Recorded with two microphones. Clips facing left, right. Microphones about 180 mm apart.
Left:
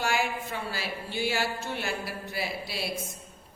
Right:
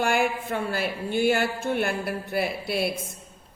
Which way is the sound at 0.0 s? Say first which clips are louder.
Right 5 dB; 55° right (ahead or behind).